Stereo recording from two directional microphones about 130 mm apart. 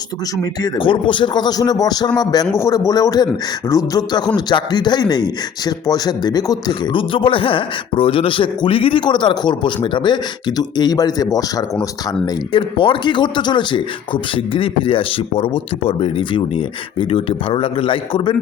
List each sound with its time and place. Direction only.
0.6 s a man's voice: 40° left (ahead or behind)
12.2 s speech: 40° left (ahead or behind)